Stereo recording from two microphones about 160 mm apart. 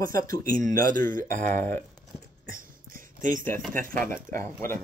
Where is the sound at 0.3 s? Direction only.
55° right (ahead or behind).